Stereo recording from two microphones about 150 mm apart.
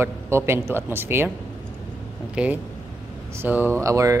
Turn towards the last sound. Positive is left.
turn(degrees=-20)  # may be behind; listen again after turning